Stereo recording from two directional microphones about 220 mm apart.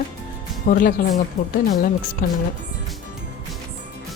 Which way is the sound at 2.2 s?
40° left (ahead or behind).